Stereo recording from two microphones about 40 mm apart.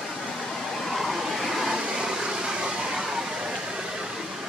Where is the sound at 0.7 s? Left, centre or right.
Centre.